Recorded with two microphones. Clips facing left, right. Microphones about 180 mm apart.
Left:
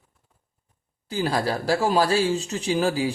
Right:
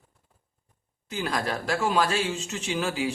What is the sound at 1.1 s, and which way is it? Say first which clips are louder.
A man's voice: left 5 dB; 30° left (ahead or behind).